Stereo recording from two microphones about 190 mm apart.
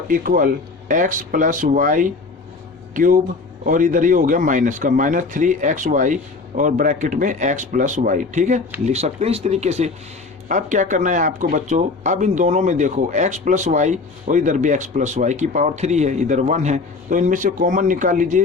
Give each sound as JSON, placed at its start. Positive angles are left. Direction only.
{"t": 0.1, "sound": "speech", "side_deg": -45}